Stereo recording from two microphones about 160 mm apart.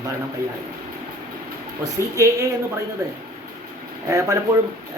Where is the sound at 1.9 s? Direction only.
20° right (ahead or behind).